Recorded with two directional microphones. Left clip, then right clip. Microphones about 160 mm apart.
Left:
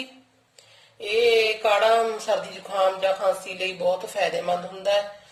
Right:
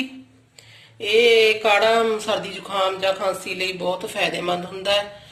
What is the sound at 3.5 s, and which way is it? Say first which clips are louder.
Speech: right 1 dB; centre (ahead or behind).